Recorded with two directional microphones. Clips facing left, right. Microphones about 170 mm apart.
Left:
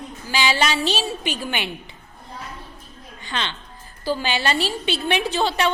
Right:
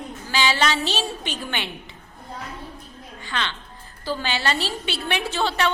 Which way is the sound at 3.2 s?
20° left (ahead or behind).